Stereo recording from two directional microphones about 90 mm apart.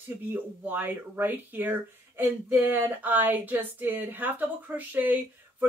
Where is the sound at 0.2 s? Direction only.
20° right (ahead or behind).